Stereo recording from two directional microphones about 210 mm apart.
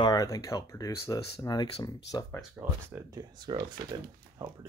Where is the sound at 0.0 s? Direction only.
20° left (ahead or behind).